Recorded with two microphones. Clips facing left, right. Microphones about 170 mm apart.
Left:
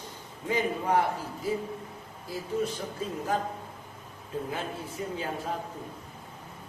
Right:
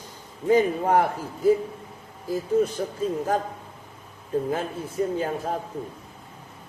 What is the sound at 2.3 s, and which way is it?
Speech, 45° right (ahead or behind).